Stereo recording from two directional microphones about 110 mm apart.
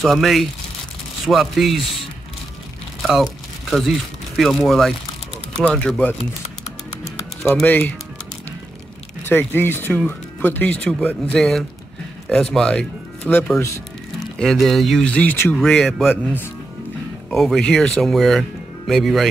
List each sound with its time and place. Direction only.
0.0 s speech: centre (ahead or behind)
3.0 s crumpling: centre (ahead or behind)
3.7 s speech: centre (ahead or behind)
5.6 s speech: 10° left (ahead or behind)
7.6 s speech: 15° left (ahead or behind)
9.2 s speech: 15° left (ahead or behind)
14.4 s speech: centre (ahead or behind); by 15.5 s 20° left (ahead or behind)
15.5 s speech: 5° left (ahead or behind)
17.3 s speech: centre (ahead or behind)